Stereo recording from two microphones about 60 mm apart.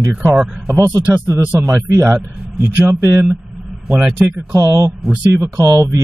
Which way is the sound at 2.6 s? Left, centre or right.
Right.